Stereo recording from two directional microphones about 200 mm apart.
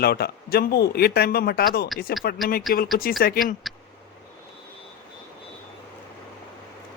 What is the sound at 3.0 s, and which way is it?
Speech, 45° left (ahead or behind).